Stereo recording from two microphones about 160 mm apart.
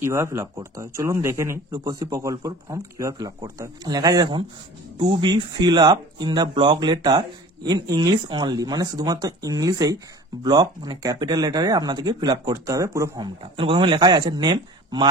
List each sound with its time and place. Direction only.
0.0 s speech: 20° right (ahead or behind)
13.6 s speech: 30° right (ahead or behind)